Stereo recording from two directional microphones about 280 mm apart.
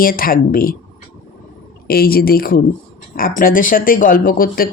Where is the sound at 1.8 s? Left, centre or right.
Left.